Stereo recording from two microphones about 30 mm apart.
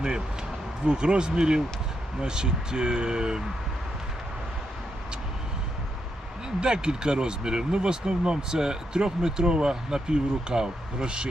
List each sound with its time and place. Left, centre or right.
0.9 s speech: right
6.6 s speech: right